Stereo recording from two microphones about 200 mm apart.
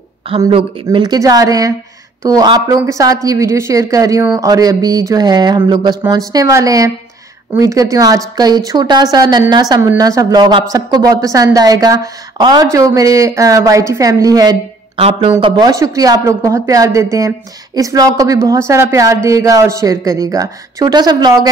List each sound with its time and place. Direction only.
0.5 s a woman's voice: 30° right (ahead or behind)